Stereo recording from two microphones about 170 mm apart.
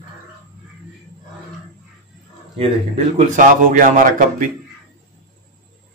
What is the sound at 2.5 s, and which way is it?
A man's voice, 40° right (ahead or behind).